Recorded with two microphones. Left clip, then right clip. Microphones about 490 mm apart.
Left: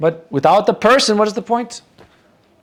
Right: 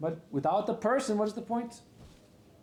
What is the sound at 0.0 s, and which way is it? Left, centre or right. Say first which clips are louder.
Speech: left 17 dB; left.